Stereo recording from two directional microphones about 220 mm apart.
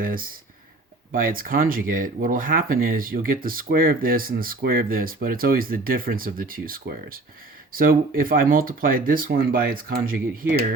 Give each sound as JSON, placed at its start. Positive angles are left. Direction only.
{"t": 0.0, "sound": "speech", "side_deg": -40}